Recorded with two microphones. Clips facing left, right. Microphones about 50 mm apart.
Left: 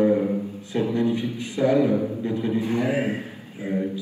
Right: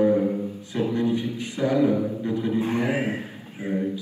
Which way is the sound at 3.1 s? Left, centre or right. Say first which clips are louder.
Left 1 dB; right.